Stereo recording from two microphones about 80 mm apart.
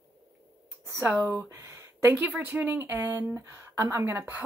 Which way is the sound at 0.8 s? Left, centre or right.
Right.